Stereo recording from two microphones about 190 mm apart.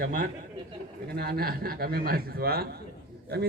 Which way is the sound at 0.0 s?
50° right (ahead or behind).